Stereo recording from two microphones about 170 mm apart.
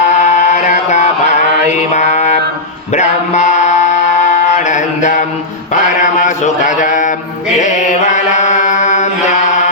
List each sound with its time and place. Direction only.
0.2 s mantra: 40° left (ahead or behind)
2.9 s music: 45° left (ahead or behind)
5.7 s mantra: 45° left (ahead or behind)